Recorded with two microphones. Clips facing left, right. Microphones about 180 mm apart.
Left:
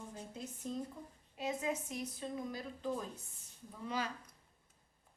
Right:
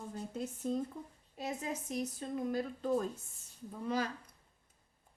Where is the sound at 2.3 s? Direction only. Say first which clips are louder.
Right 7 dB; 55° right (ahead or behind).